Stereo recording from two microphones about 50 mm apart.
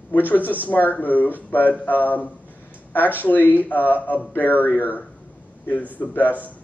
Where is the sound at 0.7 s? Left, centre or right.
Left.